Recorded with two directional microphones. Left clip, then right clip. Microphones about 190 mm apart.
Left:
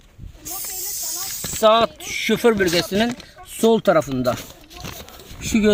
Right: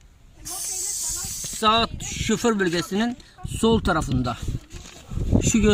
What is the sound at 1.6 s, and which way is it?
Speech, 35° right (ahead or behind).